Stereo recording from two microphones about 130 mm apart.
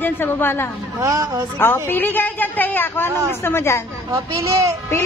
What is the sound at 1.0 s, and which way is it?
Speech, 25° right (ahead or behind).